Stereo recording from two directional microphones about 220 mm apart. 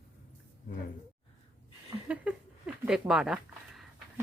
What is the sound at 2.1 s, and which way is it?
Speech, 5° right (ahead or behind).